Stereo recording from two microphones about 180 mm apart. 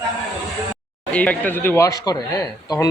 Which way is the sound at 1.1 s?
10° left (ahead or behind).